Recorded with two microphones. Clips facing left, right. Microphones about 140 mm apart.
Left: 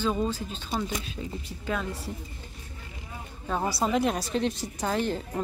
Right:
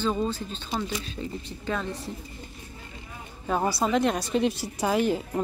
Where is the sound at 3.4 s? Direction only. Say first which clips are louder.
Right 2 dB; 5° right (ahead or behind).